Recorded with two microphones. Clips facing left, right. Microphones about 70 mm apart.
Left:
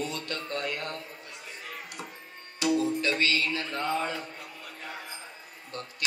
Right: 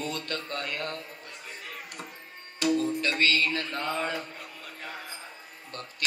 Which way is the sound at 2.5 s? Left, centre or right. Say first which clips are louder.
Even; right.